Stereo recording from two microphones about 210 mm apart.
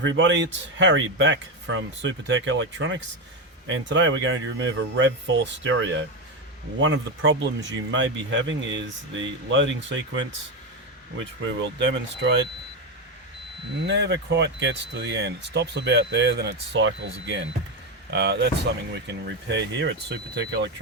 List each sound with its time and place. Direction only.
0.0 s speech: 60° right (ahead or behind)
11.4 s speech: 60° right (ahead or behind)
13.8 s speech: 55° right (ahead or behind)